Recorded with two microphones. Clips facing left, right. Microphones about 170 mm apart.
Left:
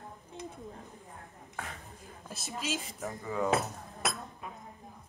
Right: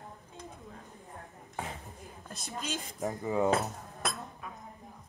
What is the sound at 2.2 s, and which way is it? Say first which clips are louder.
Speech: left 2 dB; 5° left (ahead or behind).